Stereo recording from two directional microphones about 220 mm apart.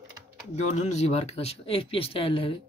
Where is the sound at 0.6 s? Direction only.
30° left (ahead or behind).